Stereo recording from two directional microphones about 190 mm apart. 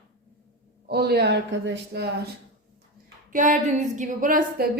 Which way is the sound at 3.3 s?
40° right (ahead or behind).